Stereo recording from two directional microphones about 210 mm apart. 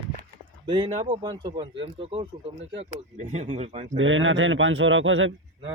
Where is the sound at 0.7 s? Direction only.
25° right (ahead or behind).